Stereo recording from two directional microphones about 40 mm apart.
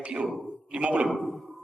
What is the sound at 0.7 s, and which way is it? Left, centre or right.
Speech, right.